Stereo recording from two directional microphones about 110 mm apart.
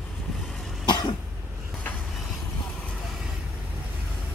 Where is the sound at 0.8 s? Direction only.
40° left (ahead or behind).